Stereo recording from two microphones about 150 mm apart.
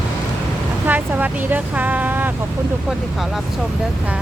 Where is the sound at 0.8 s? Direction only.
10° right (ahead or behind).